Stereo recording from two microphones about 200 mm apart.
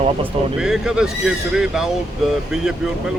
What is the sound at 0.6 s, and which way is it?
Speech, 5° right (ahead or behind).